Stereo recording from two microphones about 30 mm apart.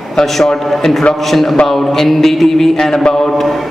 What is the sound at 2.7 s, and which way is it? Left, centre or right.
Speech, left.